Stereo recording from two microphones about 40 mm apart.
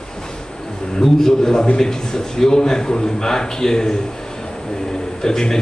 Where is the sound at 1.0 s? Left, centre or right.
Centre.